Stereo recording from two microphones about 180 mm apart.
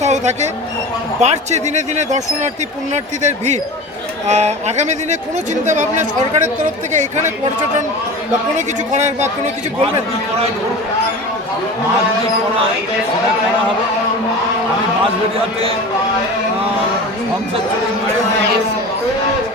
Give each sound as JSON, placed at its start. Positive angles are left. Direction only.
{"t": 0.0, "sound": "speech", "side_deg": -40}
{"t": 8.5, "sound": "speech", "side_deg": -40}